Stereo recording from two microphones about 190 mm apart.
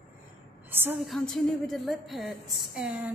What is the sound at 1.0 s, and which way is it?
A woman's voice, centre (ahead or behind).